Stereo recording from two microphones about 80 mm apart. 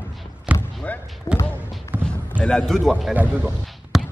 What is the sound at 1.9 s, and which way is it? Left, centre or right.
Basketball bounce, centre.